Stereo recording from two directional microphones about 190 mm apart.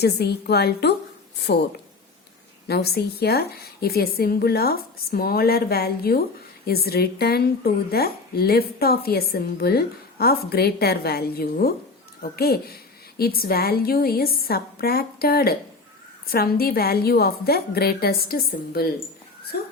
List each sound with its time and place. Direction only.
0.0 s speech: 60° left (ahead or behind)